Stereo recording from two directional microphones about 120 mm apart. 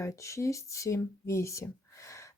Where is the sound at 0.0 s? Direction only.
25° left (ahead or behind).